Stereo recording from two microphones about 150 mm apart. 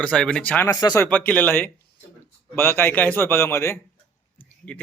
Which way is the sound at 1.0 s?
10° left (ahead or behind).